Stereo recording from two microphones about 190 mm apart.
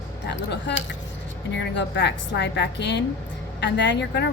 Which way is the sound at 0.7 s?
65° left (ahead or behind).